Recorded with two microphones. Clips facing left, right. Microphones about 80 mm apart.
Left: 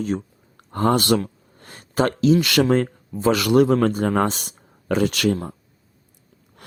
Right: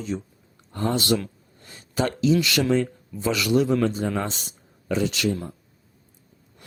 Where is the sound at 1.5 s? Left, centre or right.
Left.